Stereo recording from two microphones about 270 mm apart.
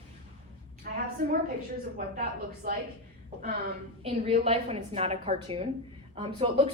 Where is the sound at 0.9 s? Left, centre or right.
Right.